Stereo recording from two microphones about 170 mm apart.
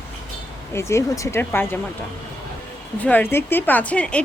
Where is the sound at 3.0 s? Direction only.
10° left (ahead or behind).